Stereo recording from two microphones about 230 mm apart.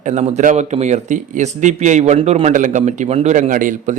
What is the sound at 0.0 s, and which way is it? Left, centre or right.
Speech, right.